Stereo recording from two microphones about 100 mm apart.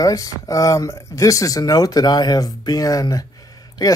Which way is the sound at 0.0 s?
35° left (ahead or behind).